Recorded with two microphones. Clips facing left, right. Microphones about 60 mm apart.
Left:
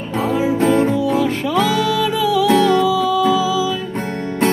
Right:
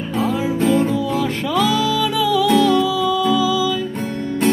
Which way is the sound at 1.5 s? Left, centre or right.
Left.